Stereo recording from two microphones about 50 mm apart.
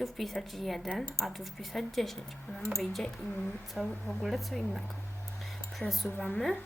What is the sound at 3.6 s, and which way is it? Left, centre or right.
Speech, centre.